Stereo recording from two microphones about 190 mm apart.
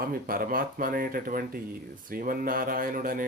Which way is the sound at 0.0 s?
50° right (ahead or behind).